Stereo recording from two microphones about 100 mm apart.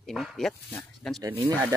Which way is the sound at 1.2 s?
35° right (ahead or behind).